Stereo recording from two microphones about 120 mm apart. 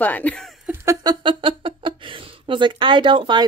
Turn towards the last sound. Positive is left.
turn(degrees=-40)  # may be behind; listen again after turning